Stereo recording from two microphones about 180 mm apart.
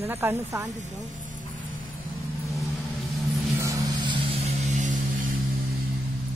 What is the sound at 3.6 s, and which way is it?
Music, 20° right (ahead or behind).